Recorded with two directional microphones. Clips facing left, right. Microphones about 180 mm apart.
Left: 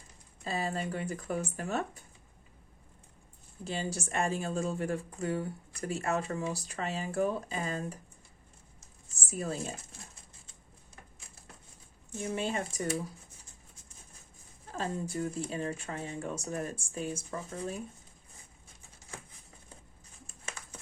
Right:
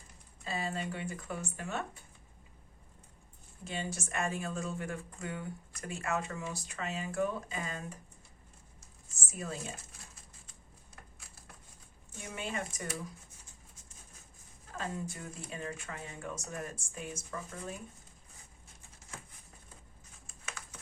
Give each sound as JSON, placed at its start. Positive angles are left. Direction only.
{"t": 0.4, "sound": "speech", "side_deg": 40}
{"t": 3.6, "sound": "speech", "side_deg": 30}
{"t": 12.2, "sound": "speech", "side_deg": 30}
{"t": 14.7, "sound": "speech", "side_deg": 30}
{"t": 20.2, "sound": "a sound", "side_deg": 30}